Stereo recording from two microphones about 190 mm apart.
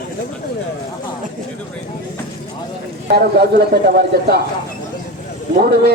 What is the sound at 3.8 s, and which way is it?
Speech, 55° right (ahead or behind).